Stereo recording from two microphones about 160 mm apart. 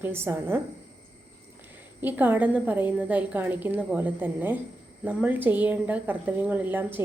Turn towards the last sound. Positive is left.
turn(degrees=-10)  # may be behind; listen again after turning